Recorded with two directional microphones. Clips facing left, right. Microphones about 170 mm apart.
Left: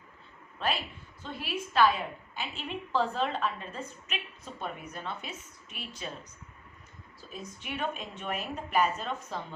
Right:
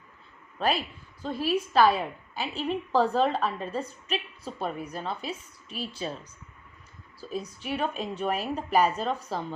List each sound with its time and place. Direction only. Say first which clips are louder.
0.6 s a woman's voice: right 5 dB; 40° right (ahead or behind)
7.2 s a woman's voice: right 9 dB; 35° right (ahead or behind)